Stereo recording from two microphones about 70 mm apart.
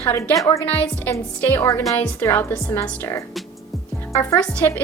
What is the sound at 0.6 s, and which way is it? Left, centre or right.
Speech, left.